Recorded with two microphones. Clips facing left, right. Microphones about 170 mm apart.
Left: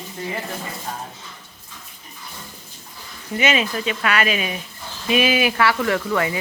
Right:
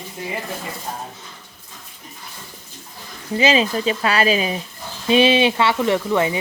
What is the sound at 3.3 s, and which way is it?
Speech, 30° right (ahead or behind).